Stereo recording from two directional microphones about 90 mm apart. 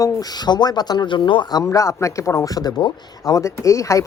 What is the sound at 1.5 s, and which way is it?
A man's voice, 35° left (ahead or behind).